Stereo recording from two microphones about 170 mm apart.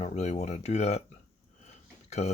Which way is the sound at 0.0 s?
40° left (ahead or behind).